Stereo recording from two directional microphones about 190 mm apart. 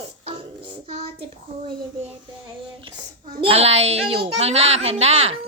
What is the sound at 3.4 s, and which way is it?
A woman's voice, 30° right (ahead or behind).